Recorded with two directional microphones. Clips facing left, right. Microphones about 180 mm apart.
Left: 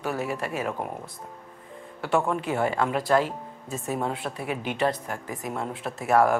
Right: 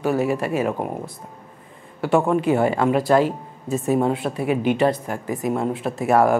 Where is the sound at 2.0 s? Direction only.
15° right (ahead or behind).